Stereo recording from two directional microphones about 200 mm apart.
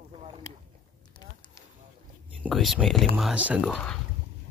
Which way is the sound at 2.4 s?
Centre (ahead or behind).